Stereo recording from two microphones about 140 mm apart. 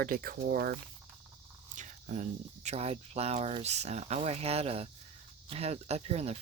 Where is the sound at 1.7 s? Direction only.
60° right (ahead or behind).